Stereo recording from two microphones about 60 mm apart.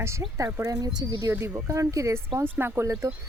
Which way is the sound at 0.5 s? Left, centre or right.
Right.